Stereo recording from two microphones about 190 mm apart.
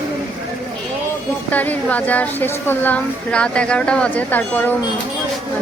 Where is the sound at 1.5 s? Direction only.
10° left (ahead or behind).